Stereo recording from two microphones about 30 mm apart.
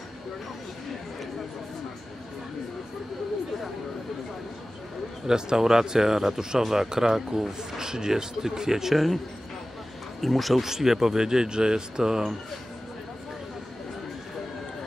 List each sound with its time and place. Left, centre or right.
5.2 s speech: right
8.9 s speech: centre
10.2 s speech: centre
10.6 s speech: centre